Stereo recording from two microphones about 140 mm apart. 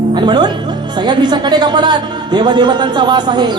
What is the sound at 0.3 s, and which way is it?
Speech, 35° right (ahead or behind).